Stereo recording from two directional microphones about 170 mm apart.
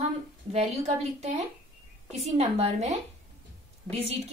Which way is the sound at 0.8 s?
45° right (ahead or behind).